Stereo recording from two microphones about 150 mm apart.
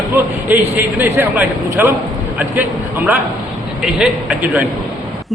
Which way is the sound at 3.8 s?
5° right (ahead or behind).